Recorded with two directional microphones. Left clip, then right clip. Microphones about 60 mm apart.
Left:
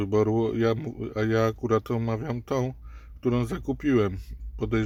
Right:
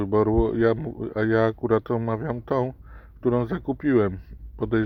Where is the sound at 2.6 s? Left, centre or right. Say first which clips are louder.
Right 4 dB; right.